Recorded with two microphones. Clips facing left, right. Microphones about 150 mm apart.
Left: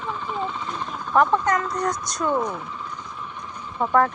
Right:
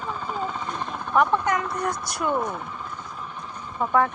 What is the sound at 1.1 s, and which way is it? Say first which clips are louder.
Speech: left 2 dB; 5° right (ahead or behind).